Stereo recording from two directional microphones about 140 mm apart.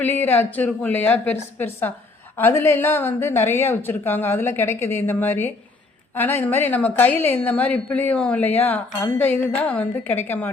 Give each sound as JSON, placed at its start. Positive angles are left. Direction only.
{"t": 0.0, "sound": "a woman's voice", "side_deg": 15}